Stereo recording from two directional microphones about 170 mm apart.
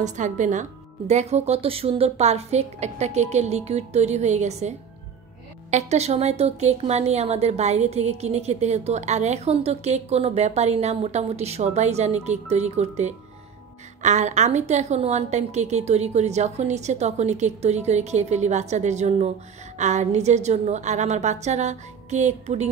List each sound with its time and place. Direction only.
0.0 s a woman's voice: 45° right (ahead or behind)